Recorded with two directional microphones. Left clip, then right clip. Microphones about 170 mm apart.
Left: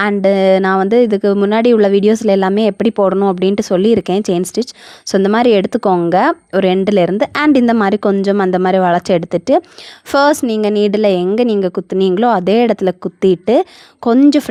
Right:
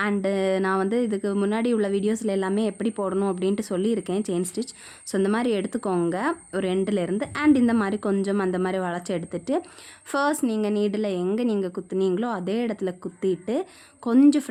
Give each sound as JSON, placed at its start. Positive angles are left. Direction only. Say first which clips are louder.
{"t": 0.0, "sound": "a woman's voice", "louder": "left 13 dB", "side_deg": 45}